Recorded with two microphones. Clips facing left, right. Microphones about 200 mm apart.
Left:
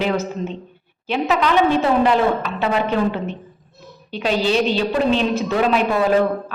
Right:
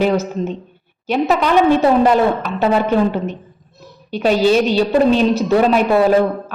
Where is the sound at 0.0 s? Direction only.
45° right (ahead or behind).